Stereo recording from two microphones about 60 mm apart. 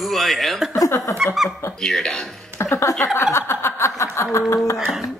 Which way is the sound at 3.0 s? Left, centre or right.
Left.